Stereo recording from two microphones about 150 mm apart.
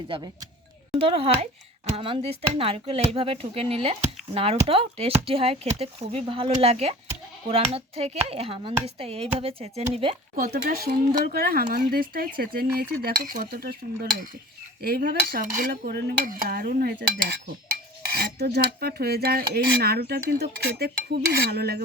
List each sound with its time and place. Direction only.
0.9 s speech: 40° right (ahead or behind)
10.3 s speech: 75° right (ahead or behind)
11.3 s speech: 90° right
11.9 s speech: 75° right (ahead or behind)
14.8 s cutlery: 90° right
18.2 s speech: 90° right